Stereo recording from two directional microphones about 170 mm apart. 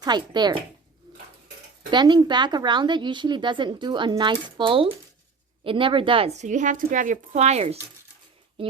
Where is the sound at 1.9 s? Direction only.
25° right (ahead or behind).